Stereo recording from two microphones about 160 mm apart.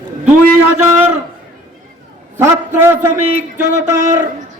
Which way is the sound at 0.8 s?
15° right (ahead or behind).